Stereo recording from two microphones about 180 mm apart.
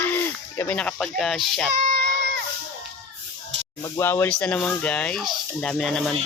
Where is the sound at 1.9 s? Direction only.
70° right (ahead or behind).